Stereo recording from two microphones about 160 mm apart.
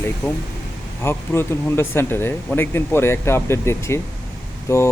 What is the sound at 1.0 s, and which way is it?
Speech, 15° left (ahead or behind).